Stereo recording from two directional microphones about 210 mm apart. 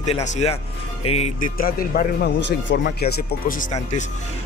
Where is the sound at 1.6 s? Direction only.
45° left (ahead or behind).